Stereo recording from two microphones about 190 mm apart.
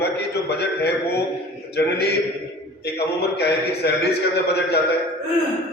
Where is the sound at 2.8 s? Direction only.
60° left (ahead or behind).